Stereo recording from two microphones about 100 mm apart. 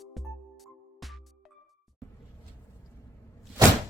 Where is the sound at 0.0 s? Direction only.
Centre (ahead or behind).